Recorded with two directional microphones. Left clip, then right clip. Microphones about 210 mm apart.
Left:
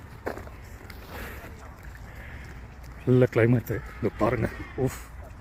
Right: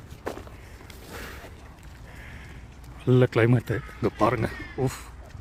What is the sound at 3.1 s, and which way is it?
Speech, 10° right (ahead or behind).